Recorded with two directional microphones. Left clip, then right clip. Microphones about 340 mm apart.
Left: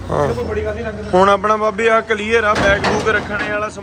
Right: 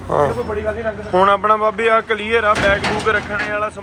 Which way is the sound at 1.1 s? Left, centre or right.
Centre.